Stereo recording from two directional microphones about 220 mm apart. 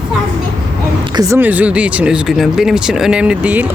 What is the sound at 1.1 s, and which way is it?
Speech, 10° right (ahead or behind).